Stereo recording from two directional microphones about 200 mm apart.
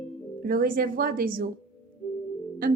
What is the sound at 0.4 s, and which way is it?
A woman's voice, 45° right (ahead or behind).